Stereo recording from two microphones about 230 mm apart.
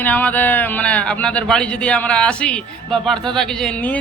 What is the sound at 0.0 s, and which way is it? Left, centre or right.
Speech, centre.